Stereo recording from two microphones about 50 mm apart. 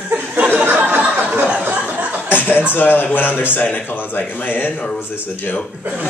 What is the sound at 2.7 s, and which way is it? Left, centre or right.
A man's voice, left.